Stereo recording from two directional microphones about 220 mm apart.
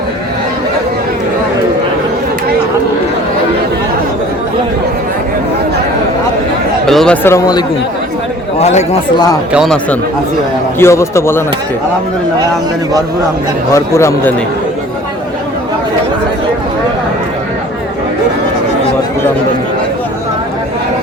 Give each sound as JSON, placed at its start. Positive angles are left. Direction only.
{"t": 6.8, "sound": "speech", "side_deg": 0}
{"t": 8.5, "sound": "speech", "side_deg": 30}
{"t": 9.5, "sound": "speech", "side_deg": 0}
{"t": 13.7, "sound": "speech", "side_deg": 15}